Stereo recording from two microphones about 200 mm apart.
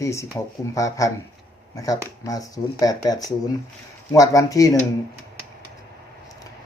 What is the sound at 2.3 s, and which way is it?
Speech, 15° left (ahead or behind).